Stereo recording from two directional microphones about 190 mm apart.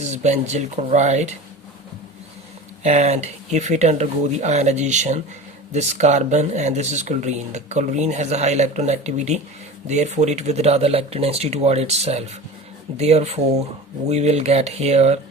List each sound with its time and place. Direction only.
0.0 s speech: 35° right (ahead or behind)
2.8 s speech: 35° right (ahead or behind)